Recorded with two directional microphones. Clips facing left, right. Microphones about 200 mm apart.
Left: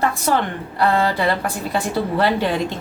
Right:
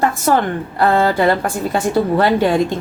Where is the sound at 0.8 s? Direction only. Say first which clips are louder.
Right 4 dB; 45° right (ahead or behind).